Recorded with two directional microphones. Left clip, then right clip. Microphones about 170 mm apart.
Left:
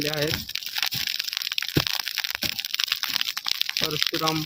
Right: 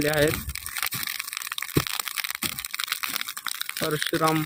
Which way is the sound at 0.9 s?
15° right (ahead or behind).